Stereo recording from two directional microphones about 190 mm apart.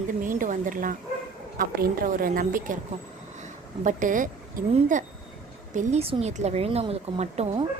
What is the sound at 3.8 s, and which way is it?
A woman's voice, 45° right (ahead or behind).